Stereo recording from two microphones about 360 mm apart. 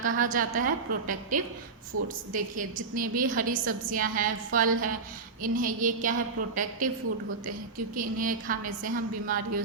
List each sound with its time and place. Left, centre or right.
0.0 s a woman's voice: right
1.9 s a woman's voice: right
2.3 s a woman's voice: right
7.9 s a woman's voice: right